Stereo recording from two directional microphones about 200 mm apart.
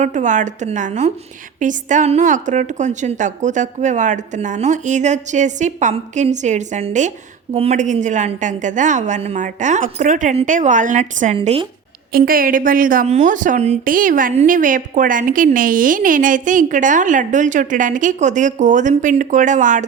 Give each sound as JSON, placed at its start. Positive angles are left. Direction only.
{"t": 0.0, "sound": "a woman's voice", "side_deg": -40}
{"t": 12.1, "sound": "a woman's voice", "side_deg": -45}